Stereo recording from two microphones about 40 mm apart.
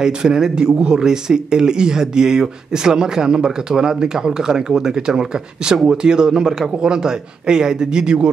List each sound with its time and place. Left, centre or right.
0.0 s a man's voice: centre